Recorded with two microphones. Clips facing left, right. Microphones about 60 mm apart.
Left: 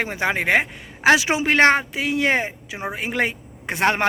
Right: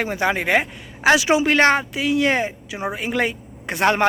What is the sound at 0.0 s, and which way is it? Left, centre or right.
A man's voice, left.